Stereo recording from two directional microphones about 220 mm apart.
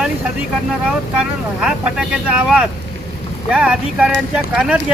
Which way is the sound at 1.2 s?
5° right (ahead or behind).